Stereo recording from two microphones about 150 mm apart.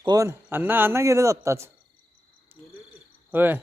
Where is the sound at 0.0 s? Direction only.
25° right (ahead or behind).